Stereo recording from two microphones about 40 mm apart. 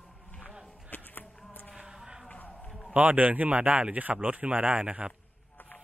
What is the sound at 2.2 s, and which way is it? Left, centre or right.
Run, left.